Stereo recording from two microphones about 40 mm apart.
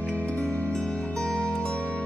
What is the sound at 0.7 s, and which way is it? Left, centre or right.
Music, left.